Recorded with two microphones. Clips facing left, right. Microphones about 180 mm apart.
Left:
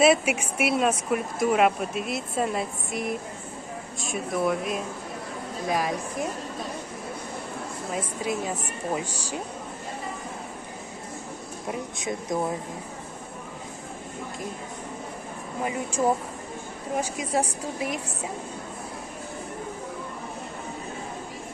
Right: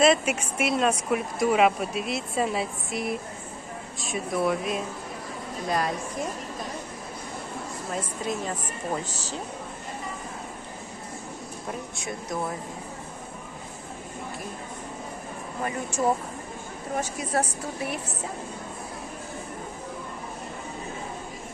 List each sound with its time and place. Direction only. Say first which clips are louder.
0.0 s speech: left 1 dB; 10° left (ahead or behind)
7.9 s speech: left 2 dB; 5° left (ahead or behind)
11.7 s speech: left 4 dB; 20° left (ahead or behind)
16.9 s speech: left 1 dB; 10° left (ahead or behind)